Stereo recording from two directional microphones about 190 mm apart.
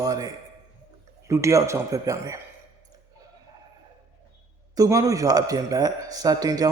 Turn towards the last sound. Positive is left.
turn(degrees=-20)  # may be behind; listen again after turning